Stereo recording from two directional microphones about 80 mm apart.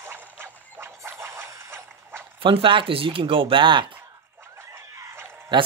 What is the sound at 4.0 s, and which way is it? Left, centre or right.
Dog, right.